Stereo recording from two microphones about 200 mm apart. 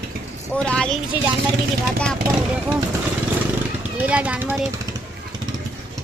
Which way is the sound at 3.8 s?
5° right (ahead or behind).